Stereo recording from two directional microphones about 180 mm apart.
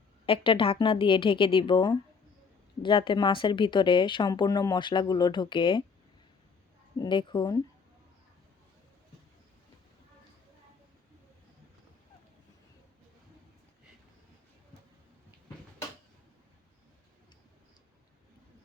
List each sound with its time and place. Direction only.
0.3 s speech: 30° left (ahead or behind)
7.0 s speech: 25° left (ahead or behind)